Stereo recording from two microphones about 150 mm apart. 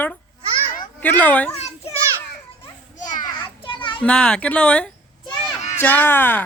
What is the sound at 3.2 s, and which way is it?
Children playing, 35° left (ahead or behind).